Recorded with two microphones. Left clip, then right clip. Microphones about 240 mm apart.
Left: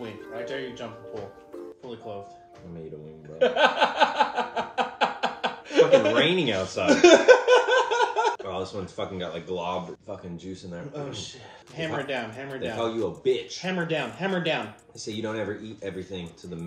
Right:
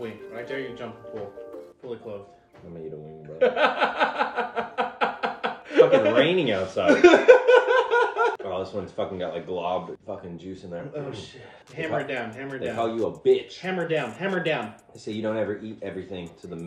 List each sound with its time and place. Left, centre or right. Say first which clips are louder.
3.3 s music: even; centre
4.6 s chuckle: left 1 dB; centre
6.1 s speech: right 2 dB; centre
7.0 s laughter: right 1 dB; centre
8.5 s speech: right 2 dB; centre
11.7 s speech: right 2 dB; centre